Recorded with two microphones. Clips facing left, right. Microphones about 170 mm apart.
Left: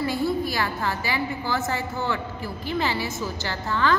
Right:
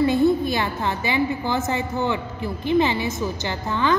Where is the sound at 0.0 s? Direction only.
20° right (ahead or behind).